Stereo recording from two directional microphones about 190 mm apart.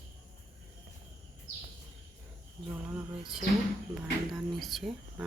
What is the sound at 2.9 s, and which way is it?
Speech, centre (ahead or behind).